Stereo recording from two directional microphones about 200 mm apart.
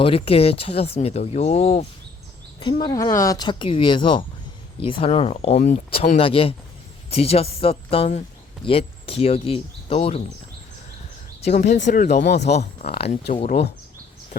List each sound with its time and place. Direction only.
0.0 s speech: 30° left (ahead or behind)
11.4 s speech: 35° left (ahead or behind)
12.2 s speech: 55° left (ahead or behind)
12.8 s speech: 30° left (ahead or behind)